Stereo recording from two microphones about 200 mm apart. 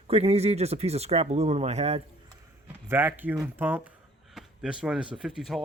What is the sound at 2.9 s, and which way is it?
Speech, 10° right (ahead or behind).